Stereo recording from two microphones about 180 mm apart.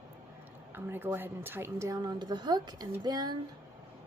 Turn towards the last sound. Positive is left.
turn(degrees=-20)  # may be behind; listen again after turning